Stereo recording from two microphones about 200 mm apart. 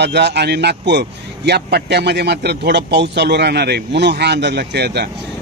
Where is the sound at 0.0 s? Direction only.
55° right (ahead or behind).